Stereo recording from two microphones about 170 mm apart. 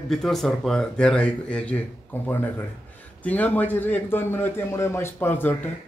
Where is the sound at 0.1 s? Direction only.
Centre (ahead or behind).